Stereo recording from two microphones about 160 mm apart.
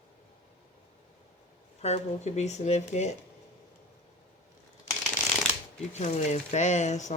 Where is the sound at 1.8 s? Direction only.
45° left (ahead or behind).